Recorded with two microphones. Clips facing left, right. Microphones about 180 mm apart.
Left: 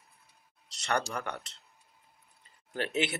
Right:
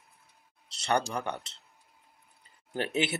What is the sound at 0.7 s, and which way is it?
Speech, 30° right (ahead or behind).